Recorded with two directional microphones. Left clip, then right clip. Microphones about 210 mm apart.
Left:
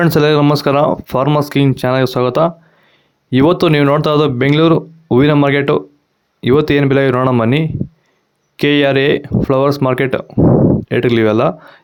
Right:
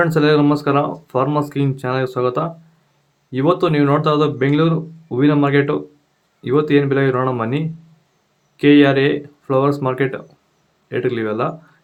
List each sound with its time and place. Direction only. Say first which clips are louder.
0.0 s speech: left 3 dB; 45° left (ahead or behind)